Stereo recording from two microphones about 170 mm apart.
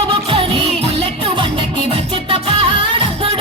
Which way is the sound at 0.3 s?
35° right (ahead or behind).